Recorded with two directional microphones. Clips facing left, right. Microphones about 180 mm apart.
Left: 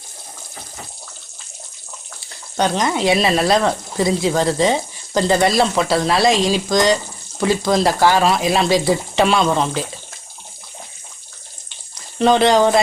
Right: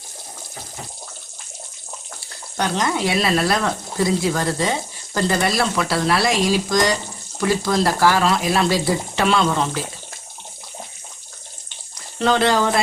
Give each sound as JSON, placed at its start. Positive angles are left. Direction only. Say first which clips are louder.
{"t": 2.6, "sound": "speech", "louder": "left 3 dB", "side_deg": 20}
{"t": 12.2, "sound": "speech", "louder": "left 4 dB", "side_deg": 20}